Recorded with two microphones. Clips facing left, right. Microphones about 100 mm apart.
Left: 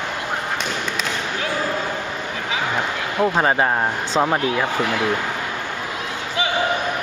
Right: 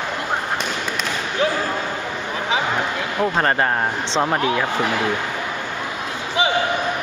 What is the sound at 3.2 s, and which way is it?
Speech, 5° left (ahead or behind).